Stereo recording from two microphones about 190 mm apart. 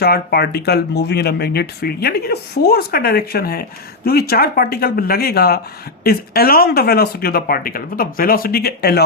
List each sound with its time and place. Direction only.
0.0 s speech: 55° left (ahead or behind)